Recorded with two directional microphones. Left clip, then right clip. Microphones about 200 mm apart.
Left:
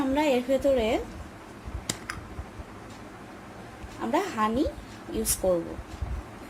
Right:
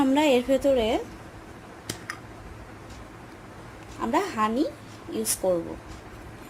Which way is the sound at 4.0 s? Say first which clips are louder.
Right 2 dB; 5° right (ahead or behind).